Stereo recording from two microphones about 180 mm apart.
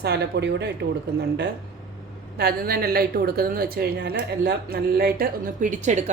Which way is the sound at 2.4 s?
60° right (ahead or behind).